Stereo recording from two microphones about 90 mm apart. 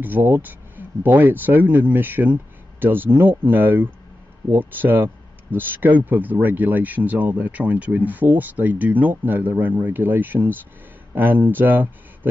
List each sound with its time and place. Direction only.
0.0 s speech: 20° right (ahead or behind)